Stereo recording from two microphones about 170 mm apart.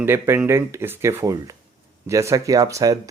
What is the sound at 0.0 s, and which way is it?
Speech, 15° right (ahead or behind).